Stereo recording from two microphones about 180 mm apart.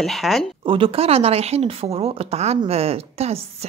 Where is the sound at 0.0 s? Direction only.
Centre (ahead or behind).